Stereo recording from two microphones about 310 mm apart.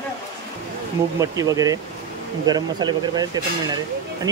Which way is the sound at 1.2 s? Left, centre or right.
Centre.